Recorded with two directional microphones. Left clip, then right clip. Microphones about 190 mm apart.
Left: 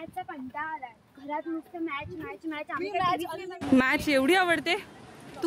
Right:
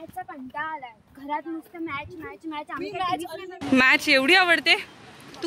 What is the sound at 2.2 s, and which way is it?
Speech, 35° right (ahead or behind).